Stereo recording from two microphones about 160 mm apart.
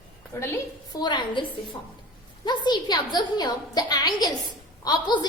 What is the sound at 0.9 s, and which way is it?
A woman's voice, 30° left (ahead or behind).